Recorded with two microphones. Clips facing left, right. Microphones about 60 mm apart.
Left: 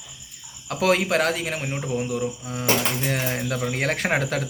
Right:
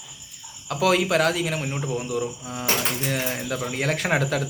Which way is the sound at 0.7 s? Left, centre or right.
Left.